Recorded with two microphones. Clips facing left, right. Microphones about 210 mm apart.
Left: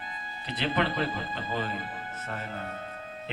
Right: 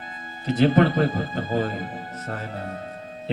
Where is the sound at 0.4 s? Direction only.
45° right (ahead or behind).